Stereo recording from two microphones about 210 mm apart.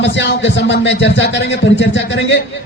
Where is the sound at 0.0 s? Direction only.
55° left (ahead or behind).